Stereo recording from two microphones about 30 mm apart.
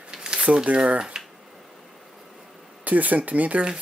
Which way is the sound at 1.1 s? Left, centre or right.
Right.